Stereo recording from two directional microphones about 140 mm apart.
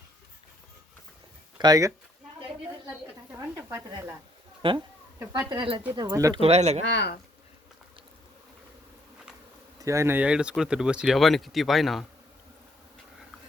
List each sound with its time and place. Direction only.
1.5 s speech: 25° right (ahead or behind)
4.6 s speech: 40° right (ahead or behind)
5.2 s speech: 25° right (ahead or behind)
6.4 s speech: 50° right (ahead or behind)
9.7 s speech: 20° right (ahead or behind)
10.2 s speech: 5° right (ahead or behind)